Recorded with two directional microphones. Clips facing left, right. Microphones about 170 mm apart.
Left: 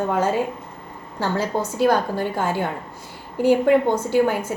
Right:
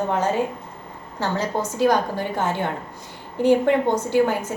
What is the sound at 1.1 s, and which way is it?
A woman's voice, 10° left (ahead or behind).